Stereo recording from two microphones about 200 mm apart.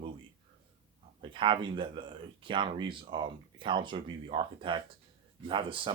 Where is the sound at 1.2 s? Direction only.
25° right (ahead or behind).